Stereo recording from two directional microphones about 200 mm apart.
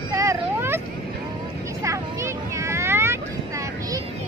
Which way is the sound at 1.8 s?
15° right (ahead or behind).